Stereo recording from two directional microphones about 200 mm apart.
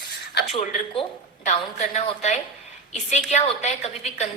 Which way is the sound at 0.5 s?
30° left (ahead or behind).